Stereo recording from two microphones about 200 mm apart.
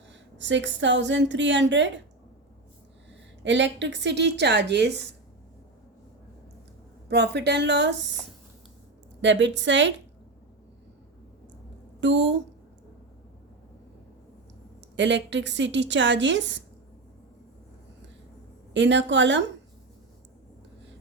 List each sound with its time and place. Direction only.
0.1 s a woman's voice: 65° right (ahead or behind)
3.4 s a woman's voice: 65° right (ahead or behind)
7.1 s a woman's voice: 55° right (ahead or behind)
9.2 s a woman's voice: 65° right (ahead or behind)
11.9 s a woman's voice: 65° right (ahead or behind)
14.9 s a woman's voice: 65° right (ahead or behind)
18.7 s a woman's voice: 65° right (ahead or behind)